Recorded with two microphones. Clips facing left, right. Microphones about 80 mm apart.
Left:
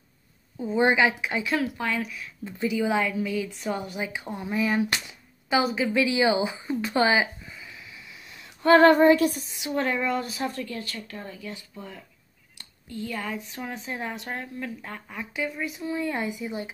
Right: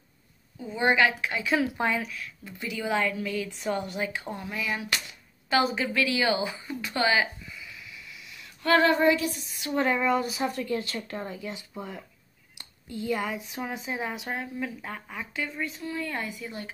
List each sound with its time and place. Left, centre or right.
0.6 s speech: left
1.4 s speech: centre
2.1 s speech: left
4.5 s speech: left
4.9 s a sound: left
5.6 s speech: centre
5.9 s speech: centre
6.9 s a sound: left
8.8 s music: left
9.8 s a woman's voice: centre
10.7 s a woman's voice: right; by 16.7 s centre